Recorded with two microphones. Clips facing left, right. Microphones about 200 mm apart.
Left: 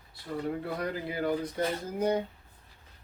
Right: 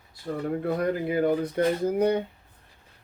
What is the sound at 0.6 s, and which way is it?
Speech, 55° right (ahead or behind).